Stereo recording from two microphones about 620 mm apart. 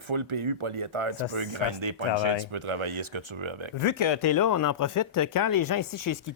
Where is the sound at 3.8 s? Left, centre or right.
Left.